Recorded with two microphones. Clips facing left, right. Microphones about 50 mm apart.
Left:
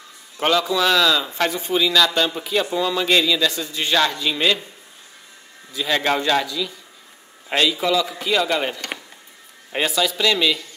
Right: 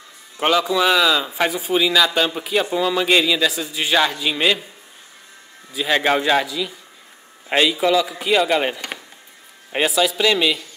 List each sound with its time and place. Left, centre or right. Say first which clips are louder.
0.4 s speech: right 1 dB; centre
5.7 s speech: right 2 dB; centre